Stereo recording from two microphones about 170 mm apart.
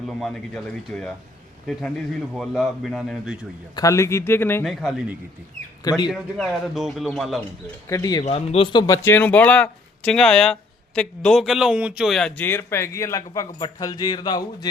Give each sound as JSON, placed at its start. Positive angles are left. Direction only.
{"t": 0.0, "sound": "speech", "side_deg": 0}
{"t": 2.3, "sound": "speech", "side_deg": 0}
{"t": 3.8, "sound": "speech", "side_deg": 20}
{"t": 4.6, "sound": "speech", "side_deg": 0}
{"t": 5.8, "sound": "speech", "side_deg": 20}
{"t": 6.1, "sound": "speech", "side_deg": 0}
{"t": 7.9, "sound": "speech", "side_deg": 20}
{"t": 8.2, "sound": "speech", "side_deg": 35}
{"t": 8.9, "sound": "speech", "side_deg": 10}